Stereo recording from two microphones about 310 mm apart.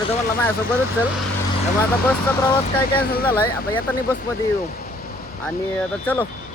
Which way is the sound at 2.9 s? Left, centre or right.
Left.